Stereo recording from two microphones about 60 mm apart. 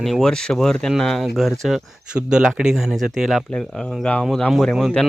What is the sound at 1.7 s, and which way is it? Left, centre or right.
Speech, centre.